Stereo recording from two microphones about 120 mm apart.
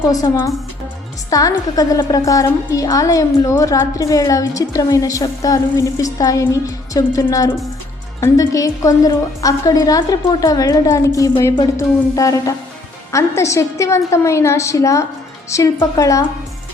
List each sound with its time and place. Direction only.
0.0 s a woman's voice: 35° left (ahead or behind)